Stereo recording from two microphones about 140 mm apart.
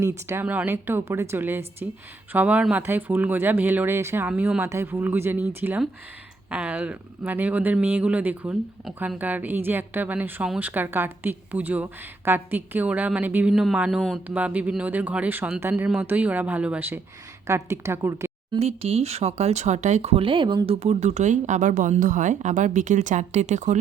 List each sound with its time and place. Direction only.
0.0 s a woman's voice: 15° right (ahead or behind)
18.6 s speech: 45° right (ahead or behind)
20.7 s speech: 50° right (ahead or behind)